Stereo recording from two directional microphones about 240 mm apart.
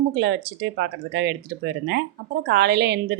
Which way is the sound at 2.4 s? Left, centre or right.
Right.